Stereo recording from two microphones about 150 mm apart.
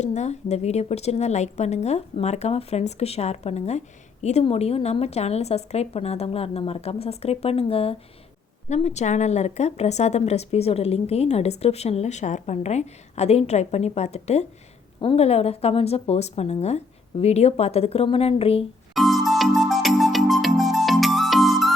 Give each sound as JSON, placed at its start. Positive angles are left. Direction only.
{"t": 0.0, "sound": "a woman's voice", "side_deg": 50}
{"t": 18.9, "sound": "music", "side_deg": 0}